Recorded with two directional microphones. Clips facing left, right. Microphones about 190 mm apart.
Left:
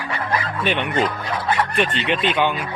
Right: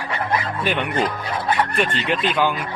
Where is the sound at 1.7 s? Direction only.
Centre (ahead or behind).